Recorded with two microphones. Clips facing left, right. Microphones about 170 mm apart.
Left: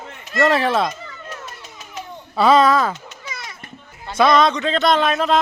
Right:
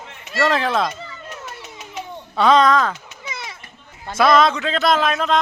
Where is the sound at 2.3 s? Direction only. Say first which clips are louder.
Left 1 dB; 5° left (ahead or behind).